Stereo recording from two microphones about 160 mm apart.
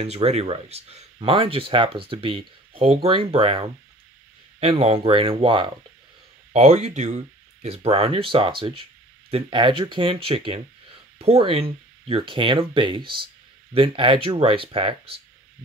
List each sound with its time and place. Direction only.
0.0 s speech: 40° right (ahead or behind)
6.5 s speech: 45° right (ahead or behind)